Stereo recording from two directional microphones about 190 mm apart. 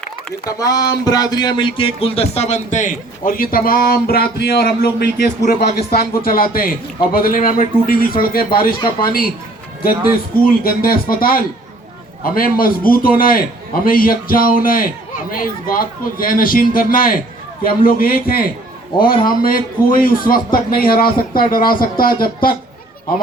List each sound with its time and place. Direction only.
0.4 s speech: 20° left (ahead or behind); by 9.3 s 50° left (ahead or behind)
10.6 s speech: 50° left (ahead or behind)